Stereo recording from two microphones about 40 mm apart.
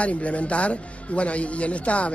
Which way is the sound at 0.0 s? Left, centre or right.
Left.